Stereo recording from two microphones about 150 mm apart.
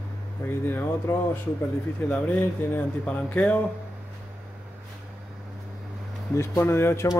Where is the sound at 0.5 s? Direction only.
15° left (ahead or behind).